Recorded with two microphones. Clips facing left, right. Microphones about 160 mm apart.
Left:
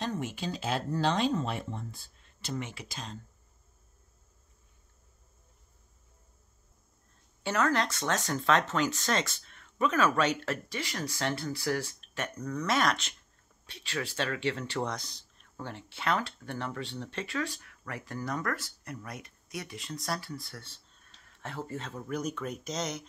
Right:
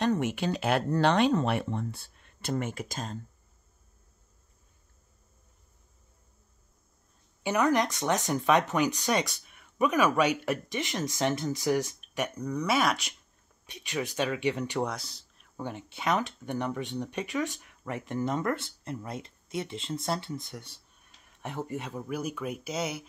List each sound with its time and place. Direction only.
0.0 s speech: 70° right (ahead or behind); by 3.2 s 45° right (ahead or behind)
7.4 s speech: 15° right (ahead or behind)
15.5 s speech: 15° right (ahead or behind)